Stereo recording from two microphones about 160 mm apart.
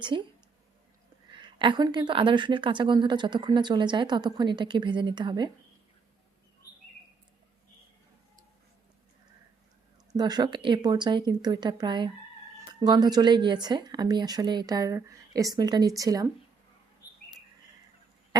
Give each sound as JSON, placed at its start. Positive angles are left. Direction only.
{"t": 0.1, "sound": "a woman's voice", "side_deg": -30}
{"t": 1.3, "sound": "a woman's voice", "side_deg": -30}
{"t": 10.2, "sound": "a woman's voice", "side_deg": -25}